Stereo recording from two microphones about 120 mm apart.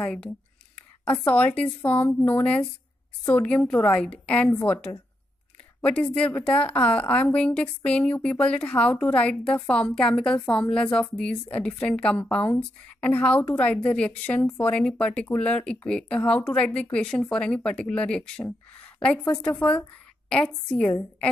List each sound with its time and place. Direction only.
0.0 s a woman's voice: 10° left (ahead or behind)
4.5 s a woman's voice: 20° left (ahead or behind)
5.8 s a woman's voice: 10° left (ahead or behind)